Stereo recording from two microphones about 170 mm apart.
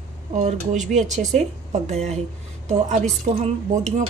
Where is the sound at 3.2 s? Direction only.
40° right (ahead or behind).